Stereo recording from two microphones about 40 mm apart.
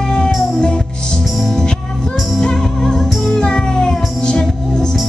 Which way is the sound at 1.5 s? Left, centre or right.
Centre.